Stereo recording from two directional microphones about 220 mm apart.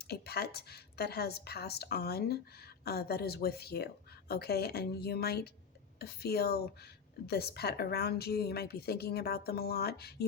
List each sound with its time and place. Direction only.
0.0 s speech: 45° left (ahead or behind)